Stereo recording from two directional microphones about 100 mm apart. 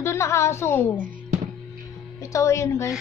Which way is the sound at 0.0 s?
30° left (ahead or behind).